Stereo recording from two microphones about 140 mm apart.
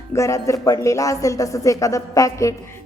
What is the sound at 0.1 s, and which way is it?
A woman's voice, 20° left (ahead or behind).